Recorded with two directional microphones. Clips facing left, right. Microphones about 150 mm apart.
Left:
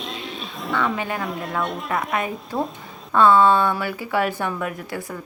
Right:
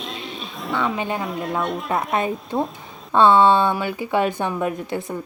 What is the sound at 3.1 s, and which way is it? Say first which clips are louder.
Speech: right 1 dB; 25° right (ahead or behind).